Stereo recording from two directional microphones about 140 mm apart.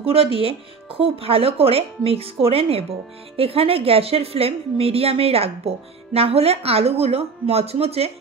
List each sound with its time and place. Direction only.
0.0 s a woman's voice: 40° right (ahead or behind)